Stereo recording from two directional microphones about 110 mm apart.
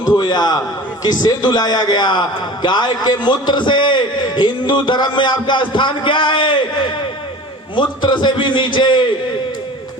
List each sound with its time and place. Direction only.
0.2 s a man's voice: 40° left (ahead or behind)